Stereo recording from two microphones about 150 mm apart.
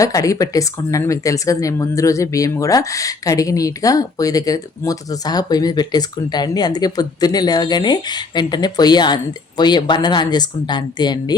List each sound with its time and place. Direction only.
0.0 s speech: 20° left (ahead or behind)